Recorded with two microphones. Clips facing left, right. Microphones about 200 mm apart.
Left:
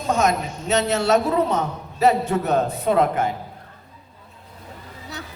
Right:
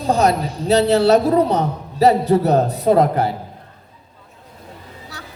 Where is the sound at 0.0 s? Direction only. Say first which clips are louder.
Right 4 dB; 35° right (ahead or behind).